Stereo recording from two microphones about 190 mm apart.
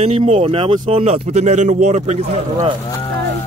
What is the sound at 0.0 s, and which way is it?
Speech, 35° right (ahead or behind).